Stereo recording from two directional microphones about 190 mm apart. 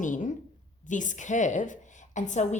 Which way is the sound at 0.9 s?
40° left (ahead or behind).